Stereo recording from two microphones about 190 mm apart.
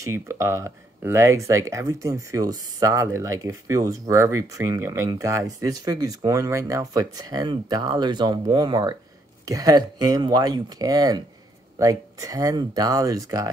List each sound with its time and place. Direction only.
0.0 s speech: 15° right (ahead or behind)